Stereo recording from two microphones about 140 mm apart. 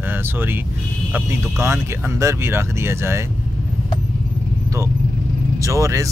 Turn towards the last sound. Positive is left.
turn(degrees=-20)  # may be behind; listen again after turning